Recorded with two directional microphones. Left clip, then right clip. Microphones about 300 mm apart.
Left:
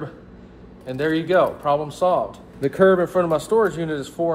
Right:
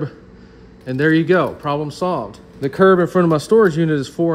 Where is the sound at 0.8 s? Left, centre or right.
Right.